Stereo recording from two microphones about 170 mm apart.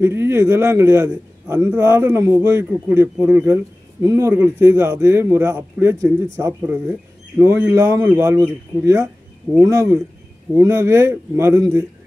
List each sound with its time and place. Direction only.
0.0 s a man's voice: 15° right (ahead or behind)